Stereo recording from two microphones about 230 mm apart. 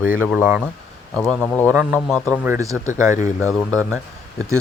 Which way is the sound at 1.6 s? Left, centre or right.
Centre.